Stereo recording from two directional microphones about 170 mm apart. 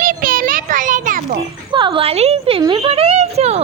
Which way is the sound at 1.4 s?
30° right (ahead or behind).